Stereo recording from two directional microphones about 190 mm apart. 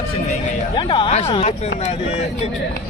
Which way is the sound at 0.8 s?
25° left (ahead or behind).